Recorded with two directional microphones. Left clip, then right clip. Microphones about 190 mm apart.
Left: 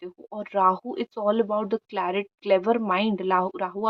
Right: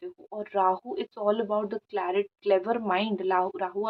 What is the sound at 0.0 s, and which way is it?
Speech, 35° left (ahead or behind).